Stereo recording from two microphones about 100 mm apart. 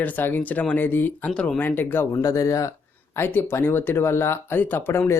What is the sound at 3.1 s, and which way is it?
Speech, 25° left (ahead or behind).